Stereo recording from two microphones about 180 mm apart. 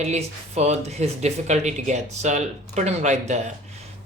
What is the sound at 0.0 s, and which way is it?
Speech, 35° right (ahead or behind).